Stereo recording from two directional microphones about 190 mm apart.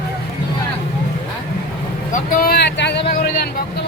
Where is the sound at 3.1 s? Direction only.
55° left (ahead or behind).